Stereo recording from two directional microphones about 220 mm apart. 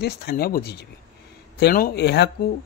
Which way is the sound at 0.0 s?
45° left (ahead or behind).